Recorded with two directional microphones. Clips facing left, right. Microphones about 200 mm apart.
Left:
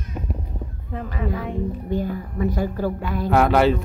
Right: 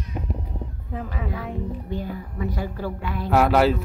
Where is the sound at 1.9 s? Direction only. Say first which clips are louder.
Left 8 dB; 45° left (ahead or behind).